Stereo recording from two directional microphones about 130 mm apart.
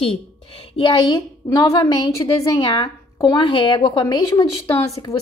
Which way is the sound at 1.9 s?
35° left (ahead or behind).